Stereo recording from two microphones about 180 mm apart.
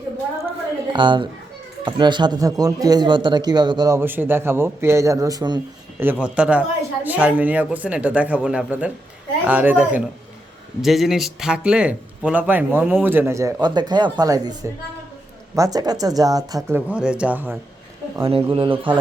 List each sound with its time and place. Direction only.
0.9 s speech: 25° right (ahead or behind)
6.0 s speech: 10° right (ahead or behind)
18.2 s speech: 30° right (ahead or behind)